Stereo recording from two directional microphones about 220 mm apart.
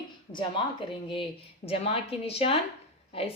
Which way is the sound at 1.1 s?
25° left (ahead or behind).